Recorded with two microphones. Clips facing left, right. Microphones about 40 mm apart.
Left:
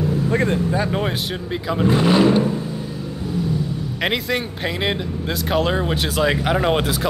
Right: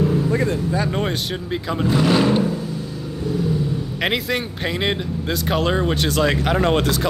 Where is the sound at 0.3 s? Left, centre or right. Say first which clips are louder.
Left 1 dB; left.